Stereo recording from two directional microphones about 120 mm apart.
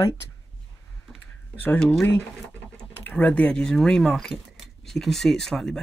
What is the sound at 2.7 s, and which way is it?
Speech, 10° left (ahead or behind).